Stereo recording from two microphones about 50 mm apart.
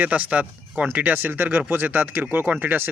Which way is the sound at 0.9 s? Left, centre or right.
Right.